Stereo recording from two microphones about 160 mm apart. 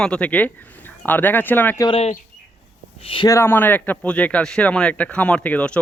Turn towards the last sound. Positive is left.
turn(degrees=10)  # may be behind; listen again after turning